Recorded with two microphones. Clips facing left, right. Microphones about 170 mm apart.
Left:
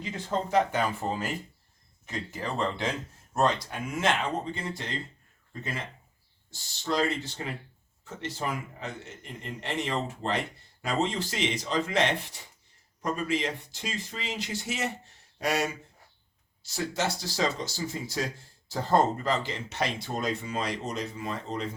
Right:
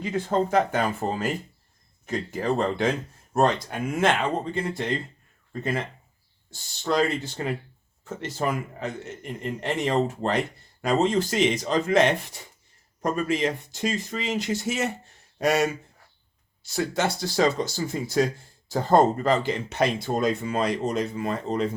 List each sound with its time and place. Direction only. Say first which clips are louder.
0.0 s speech: right 7 dB; 55° right (ahead or behind)
1.0 s speech: right 4 dB; 40° right (ahead or behind)
6.5 s speech: right 5 dB; 55° right (ahead or behind)
8.0 s speech: right 6 dB; 45° right (ahead or behind)